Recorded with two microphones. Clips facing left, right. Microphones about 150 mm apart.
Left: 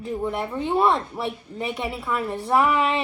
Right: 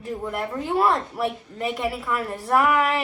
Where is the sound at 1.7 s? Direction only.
20° left (ahead or behind).